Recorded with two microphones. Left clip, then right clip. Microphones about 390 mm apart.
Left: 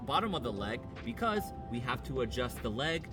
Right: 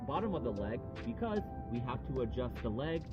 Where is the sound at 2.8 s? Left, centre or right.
Centre.